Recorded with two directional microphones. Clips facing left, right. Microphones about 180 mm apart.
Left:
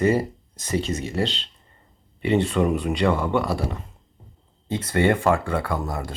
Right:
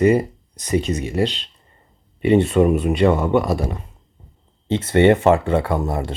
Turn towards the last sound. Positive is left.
turn(degrees=-25)  # may be behind; listen again after turning